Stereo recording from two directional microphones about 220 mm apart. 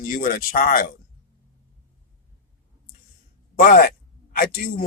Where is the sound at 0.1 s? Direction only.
40° left (ahead or behind).